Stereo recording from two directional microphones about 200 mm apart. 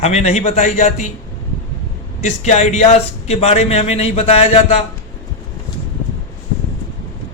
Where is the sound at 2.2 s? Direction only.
35° left (ahead or behind).